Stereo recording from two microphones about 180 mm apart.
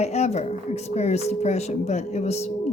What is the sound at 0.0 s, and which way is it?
Speech, 40° left (ahead or behind).